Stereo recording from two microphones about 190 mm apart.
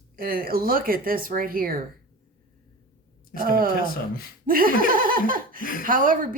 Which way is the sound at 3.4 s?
50° right (ahead or behind).